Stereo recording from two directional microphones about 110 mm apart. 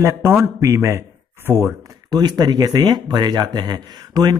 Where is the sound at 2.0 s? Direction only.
40° right (ahead or behind).